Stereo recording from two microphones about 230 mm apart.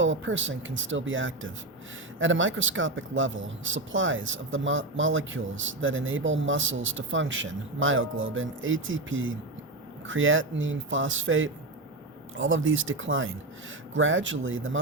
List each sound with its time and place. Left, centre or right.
0.0 s speech: right